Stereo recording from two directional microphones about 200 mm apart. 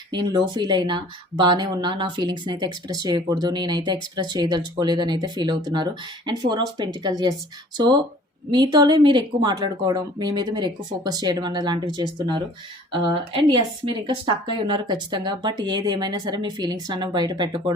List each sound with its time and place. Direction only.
0.1 s speech: 20° right (ahead or behind)
8.4 s speech: 25° right (ahead or behind)